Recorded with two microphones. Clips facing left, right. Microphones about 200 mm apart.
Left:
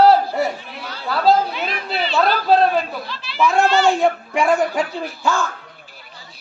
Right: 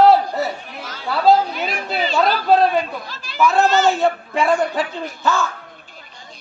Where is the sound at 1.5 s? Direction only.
45° right (ahead or behind).